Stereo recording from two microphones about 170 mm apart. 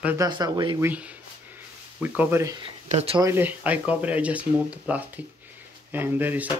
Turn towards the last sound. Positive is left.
turn(degrees=-10)  # may be behind; listen again after turning